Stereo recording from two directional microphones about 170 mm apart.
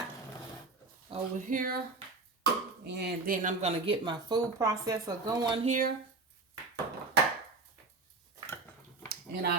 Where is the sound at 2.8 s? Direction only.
75° right (ahead or behind).